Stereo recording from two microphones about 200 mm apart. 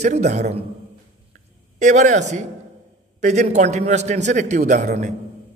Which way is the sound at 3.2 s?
35° right (ahead or behind).